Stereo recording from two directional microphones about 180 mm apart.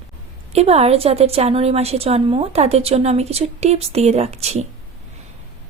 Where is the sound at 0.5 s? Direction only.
35° right (ahead or behind).